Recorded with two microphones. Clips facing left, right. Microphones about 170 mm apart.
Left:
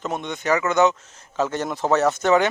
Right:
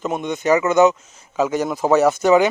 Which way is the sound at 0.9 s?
5° right (ahead or behind).